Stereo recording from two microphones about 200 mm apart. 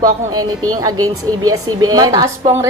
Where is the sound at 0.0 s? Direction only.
20° right (ahead or behind).